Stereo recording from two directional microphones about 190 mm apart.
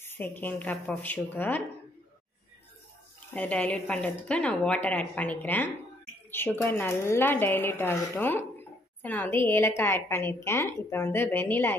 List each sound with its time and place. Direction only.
0.0 s a woman's voice: 10° left (ahead or behind)
3.3 s a woman's voice: 5° left (ahead or behind)